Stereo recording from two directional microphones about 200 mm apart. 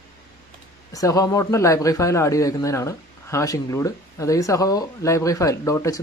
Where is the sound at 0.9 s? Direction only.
15° left (ahead or behind).